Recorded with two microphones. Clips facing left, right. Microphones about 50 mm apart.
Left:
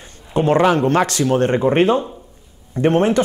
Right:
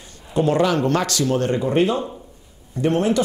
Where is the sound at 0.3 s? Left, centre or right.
Left.